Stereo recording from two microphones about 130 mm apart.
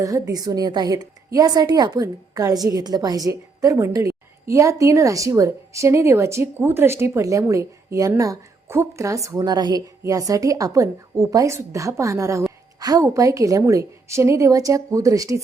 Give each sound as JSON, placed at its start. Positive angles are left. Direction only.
{"t": 0.0, "sound": "a woman's voice", "side_deg": -30}